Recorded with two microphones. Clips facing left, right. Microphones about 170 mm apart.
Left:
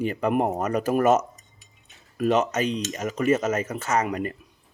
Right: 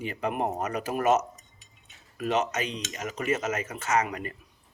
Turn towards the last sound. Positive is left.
turn(degrees=35)  # may be behind; listen again after turning